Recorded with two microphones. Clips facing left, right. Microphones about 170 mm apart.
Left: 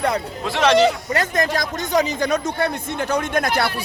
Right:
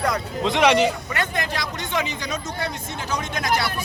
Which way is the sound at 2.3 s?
60° left (ahead or behind).